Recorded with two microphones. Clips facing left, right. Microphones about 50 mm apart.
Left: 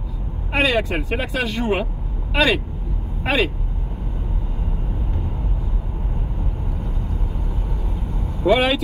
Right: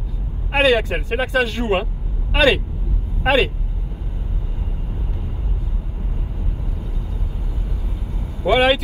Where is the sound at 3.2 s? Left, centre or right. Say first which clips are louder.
Right 3 dB; right.